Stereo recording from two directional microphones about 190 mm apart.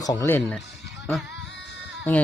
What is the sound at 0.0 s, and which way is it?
Speech, 15° left (ahead or behind).